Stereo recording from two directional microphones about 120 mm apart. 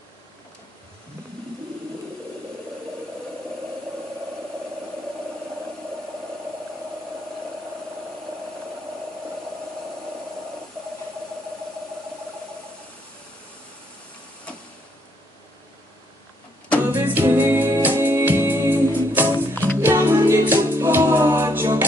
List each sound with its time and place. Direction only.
16.8 s music: 15° right (ahead or behind)
19.5 s music: 15° left (ahead or behind)
19.8 s music: 20° right (ahead or behind)